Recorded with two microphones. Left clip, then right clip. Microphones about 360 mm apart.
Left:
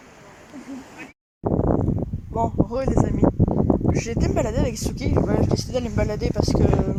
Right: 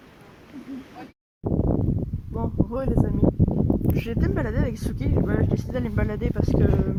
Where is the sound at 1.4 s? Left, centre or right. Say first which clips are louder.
Left 4 dB; left.